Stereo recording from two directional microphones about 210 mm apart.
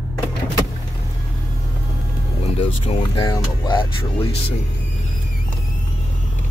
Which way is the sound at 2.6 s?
25° left (ahead or behind).